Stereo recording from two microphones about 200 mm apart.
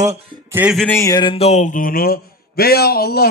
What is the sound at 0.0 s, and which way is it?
Speech, 30° right (ahead or behind).